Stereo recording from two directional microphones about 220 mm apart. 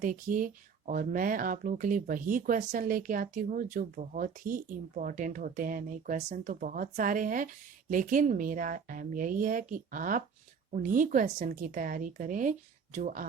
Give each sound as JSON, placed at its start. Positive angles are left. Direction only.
{"t": 0.0, "sound": "speech", "side_deg": -35}